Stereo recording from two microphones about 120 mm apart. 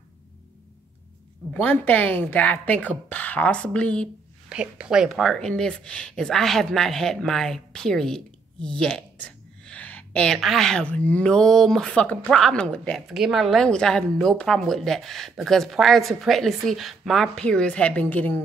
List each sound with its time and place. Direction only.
1.5 s speech: 15° left (ahead or behind)
4.5 s speech: 5° right (ahead or behind); by 13.0 s 10° left (ahead or behind)
13.1 s speech: centre (ahead or behind); by 18.4 s 15° left (ahead or behind)